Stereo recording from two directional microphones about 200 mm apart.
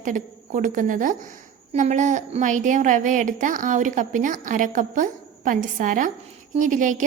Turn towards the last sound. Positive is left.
turn(degrees=-40)  # may be behind; listen again after turning